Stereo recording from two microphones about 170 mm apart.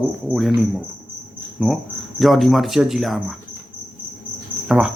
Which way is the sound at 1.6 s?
Centre (ahead or behind).